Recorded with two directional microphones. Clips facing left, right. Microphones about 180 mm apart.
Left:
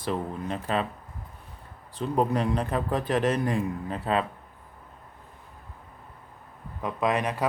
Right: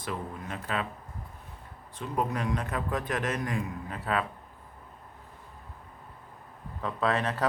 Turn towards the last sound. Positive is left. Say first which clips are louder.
# left 2 dB
turn(degrees=15)  # may be behind; listen again after turning